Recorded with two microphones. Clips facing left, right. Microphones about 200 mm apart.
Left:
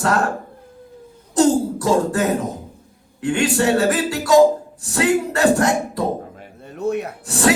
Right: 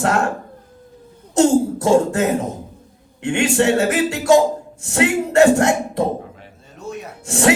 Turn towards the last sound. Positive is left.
turn(degrees=-25)  # may be behind; listen again after turning